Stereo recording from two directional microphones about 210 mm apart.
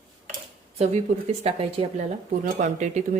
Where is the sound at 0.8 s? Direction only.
30° right (ahead or behind).